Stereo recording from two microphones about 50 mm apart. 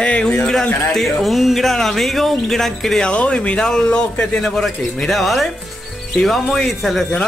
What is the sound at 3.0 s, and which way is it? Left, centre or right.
A man's voice, centre.